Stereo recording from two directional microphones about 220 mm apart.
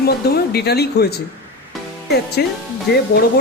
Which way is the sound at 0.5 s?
45° left (ahead or behind).